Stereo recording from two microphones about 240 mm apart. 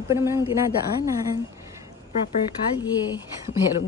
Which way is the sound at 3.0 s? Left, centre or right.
Centre.